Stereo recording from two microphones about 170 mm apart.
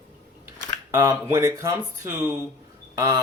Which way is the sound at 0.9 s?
15° right (ahead or behind).